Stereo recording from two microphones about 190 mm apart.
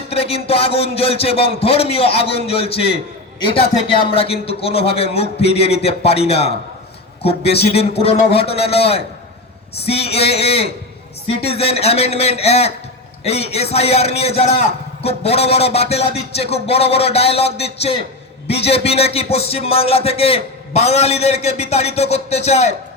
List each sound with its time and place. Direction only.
0.1 s a man's voice: 30° left (ahead or behind)
7.5 s a man's voice: 30° left (ahead or behind)